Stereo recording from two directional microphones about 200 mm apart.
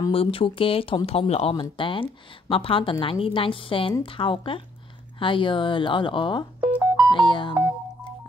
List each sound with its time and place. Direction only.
0.1 s speech: 25° left (ahead or behind)
6.6 s music: 5° right (ahead or behind)
7.1 s music: 25° left (ahead or behind)